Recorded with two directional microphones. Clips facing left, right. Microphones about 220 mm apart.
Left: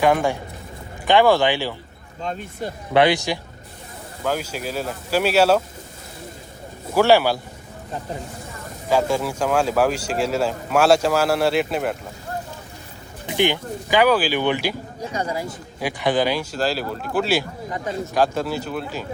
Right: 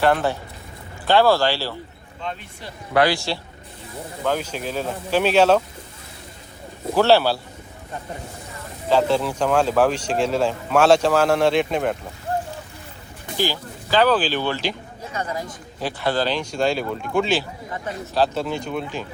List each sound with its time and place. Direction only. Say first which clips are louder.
0.0 s speech: left 1 dB; 15° left (ahead or behind)
2.2 s speech: left 5 dB; 45° left (ahead or behind)
2.9 s speech: left 2 dB; 20° left (ahead or behind)
4.2 s speech: right 1 dB; 5° left (ahead or behind)
6.9 s speech: left 1 dB; 10° left (ahead or behind)
8.9 s speech: right 1 dB; 10° left (ahead or behind)
13.3 s speech: left 4 dB; 20° left (ahead or behind); by 18.9 s 5° left (ahead or behind)